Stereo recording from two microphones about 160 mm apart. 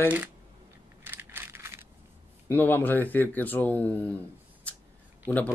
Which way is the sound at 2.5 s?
10° left (ahead or behind).